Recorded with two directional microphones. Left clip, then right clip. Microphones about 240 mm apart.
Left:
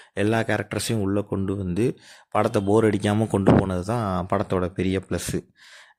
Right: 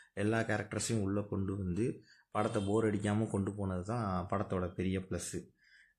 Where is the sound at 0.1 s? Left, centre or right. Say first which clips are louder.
Left 11 dB; left.